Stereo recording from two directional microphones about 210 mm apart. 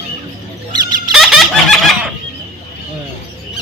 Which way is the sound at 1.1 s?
Centre (ahead or behind).